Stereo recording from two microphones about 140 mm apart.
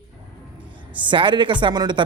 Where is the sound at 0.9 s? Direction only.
35° right (ahead or behind).